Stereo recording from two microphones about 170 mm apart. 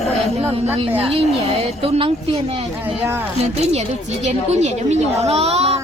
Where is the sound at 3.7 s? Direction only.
40° right (ahead or behind).